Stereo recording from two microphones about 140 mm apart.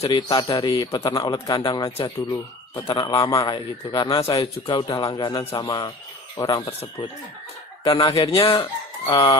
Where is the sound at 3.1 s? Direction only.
25° left (ahead or behind).